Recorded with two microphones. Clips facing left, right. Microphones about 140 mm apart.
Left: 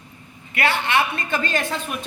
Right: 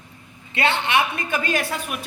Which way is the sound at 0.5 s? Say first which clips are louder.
Even; 20° right (ahead or behind).